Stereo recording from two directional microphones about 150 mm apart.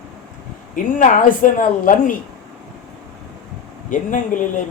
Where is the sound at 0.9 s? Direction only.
60° left (ahead or behind).